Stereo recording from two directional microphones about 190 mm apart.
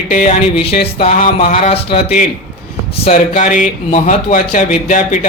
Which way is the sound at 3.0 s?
40° left (ahead or behind).